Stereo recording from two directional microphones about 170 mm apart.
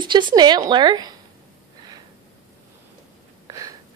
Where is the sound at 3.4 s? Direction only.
20° right (ahead or behind).